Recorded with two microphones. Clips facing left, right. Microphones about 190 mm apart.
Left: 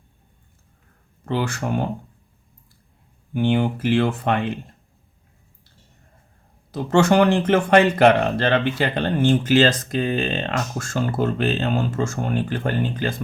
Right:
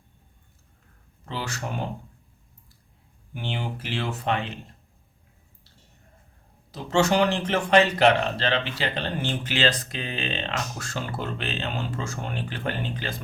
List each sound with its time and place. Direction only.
1.2 s speech: 55° left (ahead or behind)
3.3 s speech: 55° left (ahead or behind)
6.7 s speech: 55° left (ahead or behind)